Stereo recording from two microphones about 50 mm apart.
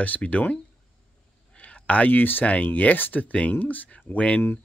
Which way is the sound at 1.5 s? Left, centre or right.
Left.